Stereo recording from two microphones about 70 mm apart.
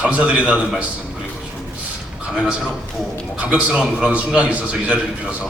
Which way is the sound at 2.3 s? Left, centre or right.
Centre.